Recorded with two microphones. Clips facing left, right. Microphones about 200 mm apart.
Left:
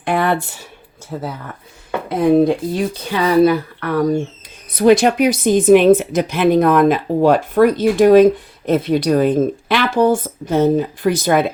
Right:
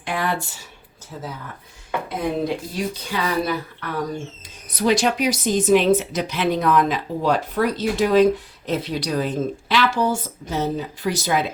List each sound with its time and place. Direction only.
0.0 s a sound: 55° left (ahead or behind)
1.1 s speech: 65° left (ahead or behind)
2.0 s speech: 50° left (ahead or behind)